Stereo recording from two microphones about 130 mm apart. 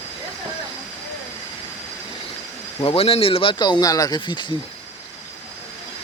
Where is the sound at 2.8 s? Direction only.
45° left (ahead or behind).